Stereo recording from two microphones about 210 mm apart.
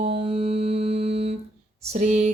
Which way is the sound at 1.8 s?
30° right (ahead or behind).